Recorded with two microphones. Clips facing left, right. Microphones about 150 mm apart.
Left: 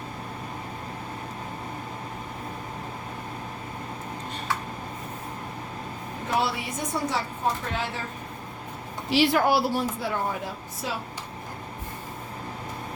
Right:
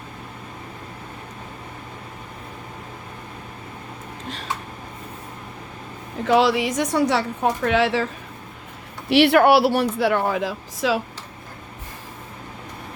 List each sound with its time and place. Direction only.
6.2 s a woman's voice: 90° right
9.0 s speech: 65° right (ahead or behind); by 11.0 s 90° right